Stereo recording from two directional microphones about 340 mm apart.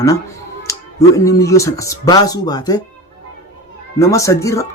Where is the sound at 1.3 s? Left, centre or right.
Centre.